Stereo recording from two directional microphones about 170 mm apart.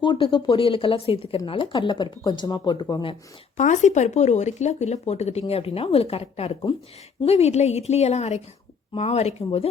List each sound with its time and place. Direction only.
0.0 s speech: 30° left (ahead or behind)
3.6 s speech: 45° left (ahead or behind)